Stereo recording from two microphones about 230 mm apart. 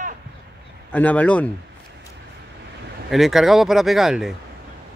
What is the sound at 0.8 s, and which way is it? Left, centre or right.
Speech, centre.